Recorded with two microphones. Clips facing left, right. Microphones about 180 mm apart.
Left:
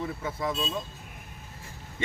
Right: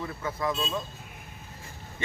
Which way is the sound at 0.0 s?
25° left (ahead or behind).